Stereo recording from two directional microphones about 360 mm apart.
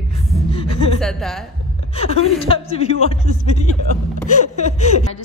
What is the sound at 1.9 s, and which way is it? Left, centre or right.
Speech, centre.